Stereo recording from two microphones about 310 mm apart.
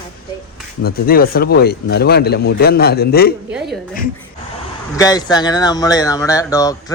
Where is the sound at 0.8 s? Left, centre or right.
Left.